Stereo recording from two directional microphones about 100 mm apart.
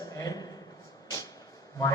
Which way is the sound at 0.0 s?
35° left (ahead or behind).